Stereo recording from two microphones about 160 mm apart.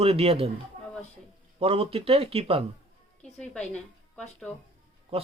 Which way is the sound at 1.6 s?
35° right (ahead or behind).